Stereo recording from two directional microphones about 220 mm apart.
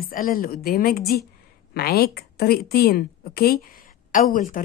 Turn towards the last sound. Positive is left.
turn(degrees=40)  # may be behind; listen again after turning